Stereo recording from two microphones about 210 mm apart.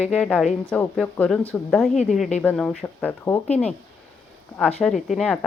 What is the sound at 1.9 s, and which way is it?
Speech, 35° left (ahead or behind).